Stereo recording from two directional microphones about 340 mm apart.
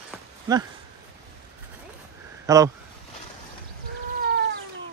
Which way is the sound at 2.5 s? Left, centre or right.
Centre.